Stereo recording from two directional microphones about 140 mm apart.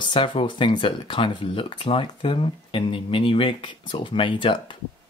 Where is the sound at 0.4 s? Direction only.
35° left (ahead or behind).